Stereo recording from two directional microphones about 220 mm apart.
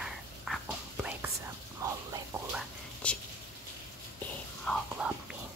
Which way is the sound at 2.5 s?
5° left (ahead or behind).